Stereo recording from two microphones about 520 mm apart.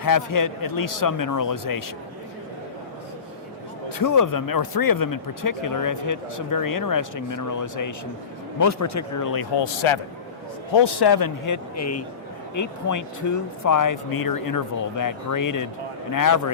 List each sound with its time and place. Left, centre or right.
0.0 s speech: left
3.8 s speech: left
10.8 s speech: left